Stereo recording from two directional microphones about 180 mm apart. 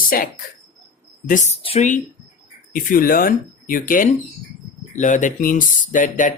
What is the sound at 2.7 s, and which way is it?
Speech, 50° left (ahead or behind).